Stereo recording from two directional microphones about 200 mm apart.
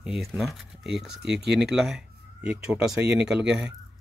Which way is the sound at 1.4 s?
55° right (ahead or behind).